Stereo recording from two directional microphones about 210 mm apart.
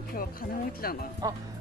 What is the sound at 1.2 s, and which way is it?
Speech, 20° right (ahead or behind).